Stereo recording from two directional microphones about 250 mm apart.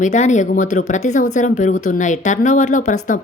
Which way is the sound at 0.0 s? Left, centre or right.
Left.